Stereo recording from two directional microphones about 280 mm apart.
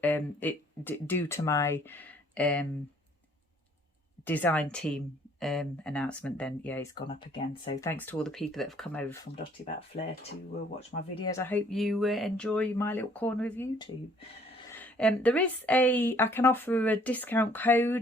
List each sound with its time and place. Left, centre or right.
0.0 s a woman's voice: centre
4.3 s speech: centre
7.1 s speech: centre
7.9 s speech: centre
10.8 s speech: left
11.3 s speech: centre
14.7 s a woman's voice: centre